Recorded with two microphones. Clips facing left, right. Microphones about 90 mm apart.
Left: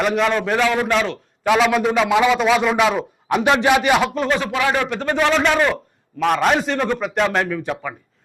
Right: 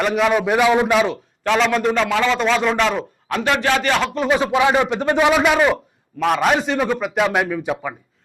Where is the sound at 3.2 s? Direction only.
15° left (ahead or behind).